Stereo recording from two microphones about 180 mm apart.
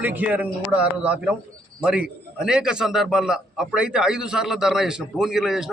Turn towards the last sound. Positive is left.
turn(degrees=0)  # may be behind; listen again after turning